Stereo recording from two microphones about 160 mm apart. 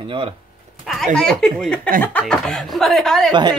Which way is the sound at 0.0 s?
35° right (ahead or behind).